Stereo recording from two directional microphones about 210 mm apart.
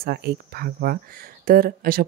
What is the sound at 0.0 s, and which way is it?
Speech, 50° right (ahead or behind).